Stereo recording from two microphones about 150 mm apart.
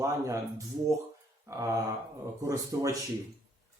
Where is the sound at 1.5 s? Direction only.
20° right (ahead or behind).